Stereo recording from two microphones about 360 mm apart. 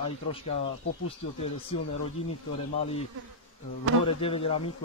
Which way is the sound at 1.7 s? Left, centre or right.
Left.